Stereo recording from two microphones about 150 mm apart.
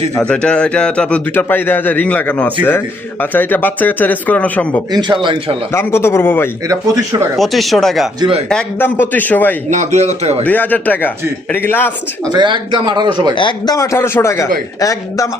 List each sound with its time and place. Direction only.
0.2 s a man's voice: 5° left (ahead or behind)
4.9 s speech: 30° right (ahead or behind)
5.7 s a man's voice: 15° left (ahead or behind)
6.7 s a man's voice: 20° right (ahead or behind)
7.3 s a man's voice: centre (ahead or behind)
9.6 s a man's voice: 55° right (ahead or behind)
10.4 s a man's voice: 10° left (ahead or behind)
12.3 s speech: 30° right (ahead or behind)
13.3 s speech: 30° left (ahead or behind)